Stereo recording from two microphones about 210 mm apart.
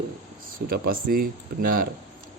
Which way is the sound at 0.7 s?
45° right (ahead or behind).